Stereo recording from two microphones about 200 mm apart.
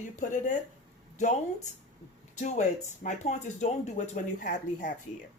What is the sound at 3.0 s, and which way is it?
Speech, 35° left (ahead or behind).